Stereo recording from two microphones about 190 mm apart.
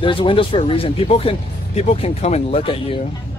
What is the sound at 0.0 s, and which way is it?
A man's voice, 25° left (ahead or behind).